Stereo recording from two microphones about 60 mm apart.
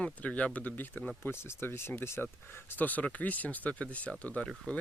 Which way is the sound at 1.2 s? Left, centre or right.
Left.